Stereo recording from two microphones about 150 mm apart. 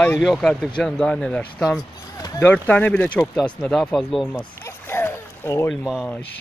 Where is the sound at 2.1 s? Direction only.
25° left (ahead or behind).